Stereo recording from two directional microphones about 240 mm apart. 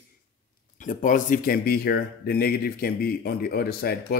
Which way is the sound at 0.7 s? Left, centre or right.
Left.